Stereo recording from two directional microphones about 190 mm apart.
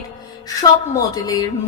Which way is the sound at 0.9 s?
20° left (ahead or behind).